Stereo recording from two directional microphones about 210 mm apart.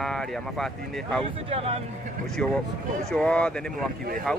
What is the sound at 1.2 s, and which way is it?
Speech, 30° right (ahead or behind).